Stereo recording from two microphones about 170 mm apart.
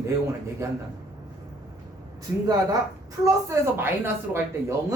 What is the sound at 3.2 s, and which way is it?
A woman's voice, 15° right (ahead or behind).